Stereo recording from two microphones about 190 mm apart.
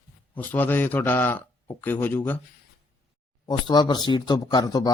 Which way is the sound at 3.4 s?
20° left (ahead or behind).